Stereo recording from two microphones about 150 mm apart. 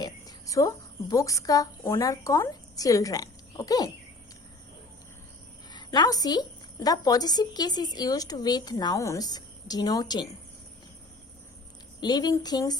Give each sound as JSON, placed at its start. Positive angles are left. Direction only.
{"t": 0.0, "sound": "a woman's voice", "side_deg": 25}
{"t": 5.7, "sound": "a woman's voice", "side_deg": 25}
{"t": 11.9, "sound": "a woman's voice", "side_deg": 25}